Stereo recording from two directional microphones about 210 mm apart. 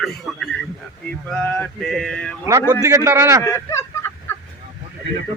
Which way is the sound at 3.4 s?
15° left (ahead or behind).